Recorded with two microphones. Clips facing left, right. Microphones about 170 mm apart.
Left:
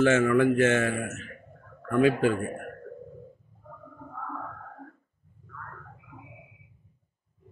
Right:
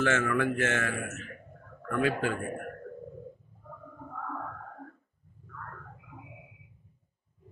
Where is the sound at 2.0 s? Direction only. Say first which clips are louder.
Left 7 dB; 20° left (ahead or behind).